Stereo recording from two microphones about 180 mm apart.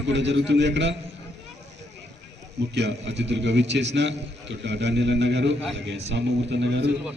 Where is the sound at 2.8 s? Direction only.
75° right (ahead or behind).